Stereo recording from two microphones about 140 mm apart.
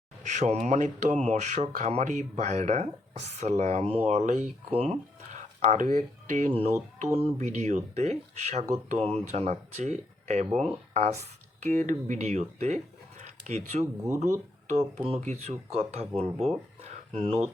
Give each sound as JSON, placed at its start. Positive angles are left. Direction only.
{"t": 0.2, "sound": "speech", "side_deg": -60}
{"t": 7.0, "sound": "speech", "side_deg": -45}
{"t": 16.8, "sound": "a sound", "side_deg": -45}